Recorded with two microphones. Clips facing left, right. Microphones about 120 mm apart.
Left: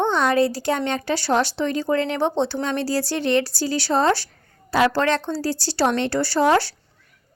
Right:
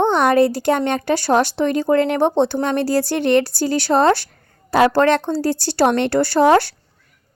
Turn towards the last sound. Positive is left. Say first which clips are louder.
# right 5 dB
turn(degrees=-55)  # may be behind; listen again after turning